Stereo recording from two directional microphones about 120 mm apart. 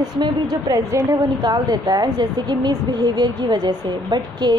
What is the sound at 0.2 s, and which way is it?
A woman's voice, 35° right (ahead or behind).